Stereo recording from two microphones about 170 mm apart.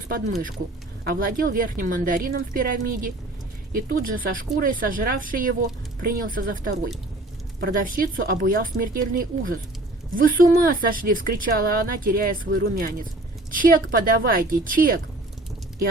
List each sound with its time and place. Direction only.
1.0 s a woman's voice: 55° right (ahead or behind)